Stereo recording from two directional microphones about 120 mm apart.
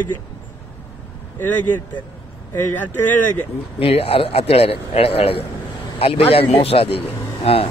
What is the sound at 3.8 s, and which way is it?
A man's voice, 50° left (ahead or behind).